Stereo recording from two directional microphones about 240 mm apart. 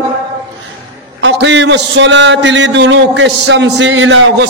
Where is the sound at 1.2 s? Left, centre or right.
Right.